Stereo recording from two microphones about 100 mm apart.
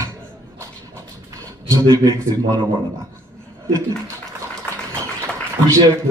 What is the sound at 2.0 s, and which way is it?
Speech, 35° right (ahead or behind).